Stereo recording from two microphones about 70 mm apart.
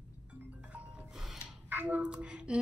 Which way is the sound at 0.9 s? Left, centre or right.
Centre.